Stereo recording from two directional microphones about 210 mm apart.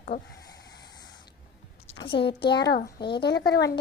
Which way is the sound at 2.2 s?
55° left (ahead or behind).